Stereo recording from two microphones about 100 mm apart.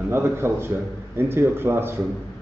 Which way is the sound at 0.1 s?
25° right (ahead or behind).